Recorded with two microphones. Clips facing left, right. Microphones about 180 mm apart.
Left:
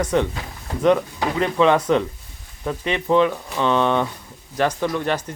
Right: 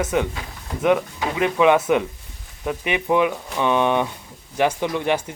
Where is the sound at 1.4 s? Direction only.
10° right (ahead or behind).